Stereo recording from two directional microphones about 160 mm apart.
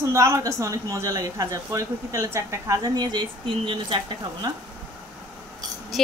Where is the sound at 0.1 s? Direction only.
20° right (ahead or behind).